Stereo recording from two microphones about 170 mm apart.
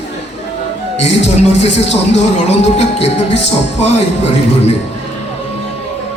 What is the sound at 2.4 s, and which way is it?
Music, 40° left (ahead or behind).